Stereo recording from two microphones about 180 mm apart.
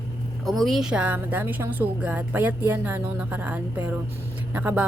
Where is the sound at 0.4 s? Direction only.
Centre (ahead or behind).